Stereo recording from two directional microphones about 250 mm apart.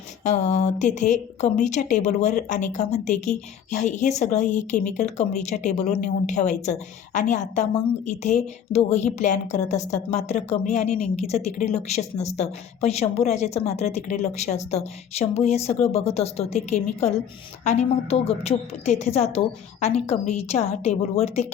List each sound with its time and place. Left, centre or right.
0.3 s a woman's voice: left